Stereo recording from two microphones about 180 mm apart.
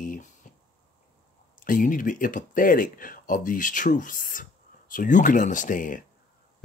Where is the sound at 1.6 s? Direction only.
50° left (ahead or behind).